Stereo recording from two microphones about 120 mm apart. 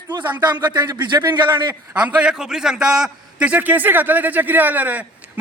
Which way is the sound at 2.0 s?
10° right (ahead or behind).